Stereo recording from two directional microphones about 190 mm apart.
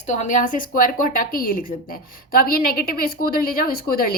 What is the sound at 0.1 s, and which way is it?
A woman's voice, 40° left (ahead or behind).